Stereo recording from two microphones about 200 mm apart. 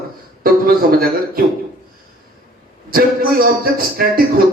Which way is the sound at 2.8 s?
45° right (ahead or behind).